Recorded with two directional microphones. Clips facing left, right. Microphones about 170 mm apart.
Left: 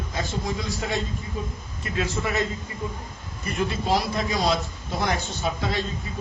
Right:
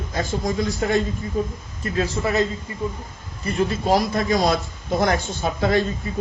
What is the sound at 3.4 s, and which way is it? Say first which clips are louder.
A man's voice: right 5 dB; 35° right (ahead or behind).